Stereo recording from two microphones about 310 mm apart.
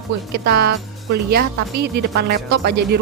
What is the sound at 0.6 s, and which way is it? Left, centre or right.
Speech, right.